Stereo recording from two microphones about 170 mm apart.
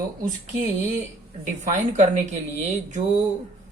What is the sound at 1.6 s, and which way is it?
Speech, 45° right (ahead or behind).